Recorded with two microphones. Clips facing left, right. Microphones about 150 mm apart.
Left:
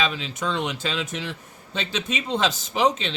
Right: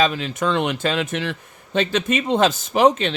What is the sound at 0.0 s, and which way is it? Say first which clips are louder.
A man's voice: right 6 dB; 50° right (ahead or behind).